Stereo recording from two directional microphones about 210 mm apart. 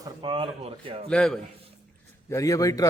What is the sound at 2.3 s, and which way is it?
Speech, 15° left (ahead or behind).